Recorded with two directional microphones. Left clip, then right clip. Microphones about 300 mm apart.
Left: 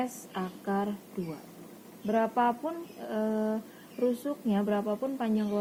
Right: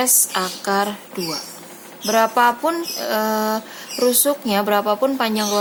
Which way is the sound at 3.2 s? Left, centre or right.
Right.